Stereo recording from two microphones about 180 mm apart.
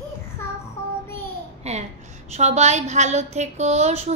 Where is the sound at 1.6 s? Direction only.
35° right (ahead or behind).